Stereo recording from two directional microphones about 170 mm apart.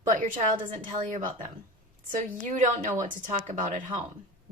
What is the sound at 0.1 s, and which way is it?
A woman's voice, 50° right (ahead or behind).